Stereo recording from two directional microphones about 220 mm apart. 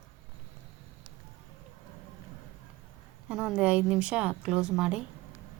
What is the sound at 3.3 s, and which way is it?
A woman's voice, 5° right (ahead or behind).